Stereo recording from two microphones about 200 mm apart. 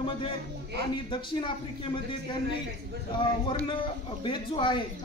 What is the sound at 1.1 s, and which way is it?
A man's voice, 25° left (ahead or behind).